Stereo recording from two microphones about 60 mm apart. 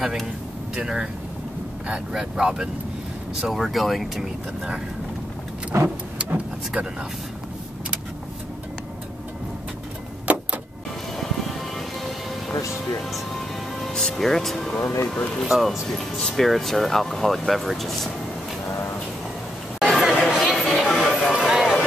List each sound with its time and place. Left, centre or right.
0.7 s speech: centre
2.1 s speech: centre
5.7 s vehicle: right
6.1 s vehicle: right
10.3 s vehicle: right
13.9 s speech: centre
15.4 s speech: centre
19.8 s chatter: centre
20.6 s a sound: centre
21.4 s a sound: centre